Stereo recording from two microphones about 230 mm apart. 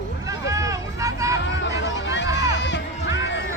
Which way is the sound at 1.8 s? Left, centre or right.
Left.